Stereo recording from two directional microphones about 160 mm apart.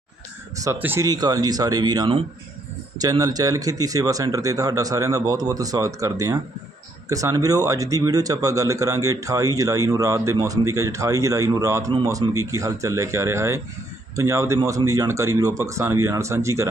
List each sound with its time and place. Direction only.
0.5 s speech: 20° right (ahead or behind)